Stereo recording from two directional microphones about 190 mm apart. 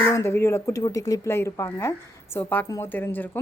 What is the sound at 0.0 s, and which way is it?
Speech, 15° left (ahead or behind).